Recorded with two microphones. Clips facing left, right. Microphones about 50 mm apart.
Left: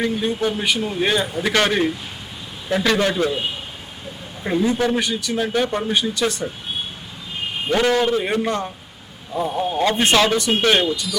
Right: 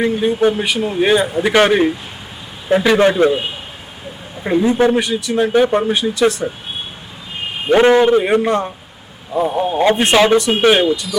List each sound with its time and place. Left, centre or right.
0.1 s speech: centre
4.4 s speech: centre
5.5 s speech: centre
5.9 s speech: centre
7.7 s speech: right
8.4 s speech: centre
9.3 s speech: centre
10.3 s speech: centre